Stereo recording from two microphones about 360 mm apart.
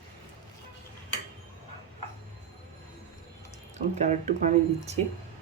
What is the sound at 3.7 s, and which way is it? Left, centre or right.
Speech, centre.